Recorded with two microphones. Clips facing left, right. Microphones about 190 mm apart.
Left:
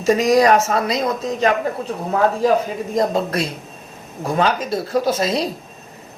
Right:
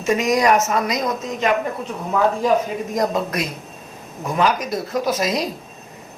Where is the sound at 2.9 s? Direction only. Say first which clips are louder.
Left 3 dB; 30° left (ahead or behind).